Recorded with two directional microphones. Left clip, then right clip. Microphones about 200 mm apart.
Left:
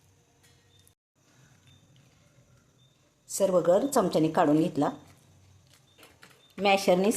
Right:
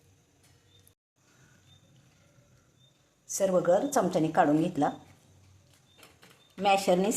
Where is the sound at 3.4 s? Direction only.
15° left (ahead or behind).